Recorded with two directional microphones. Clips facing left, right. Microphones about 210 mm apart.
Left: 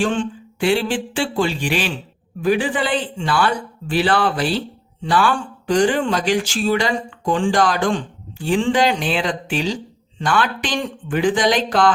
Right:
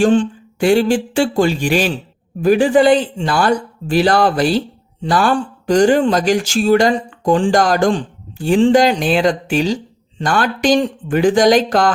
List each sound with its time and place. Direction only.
0.0 s a man's voice: 40° right (ahead or behind)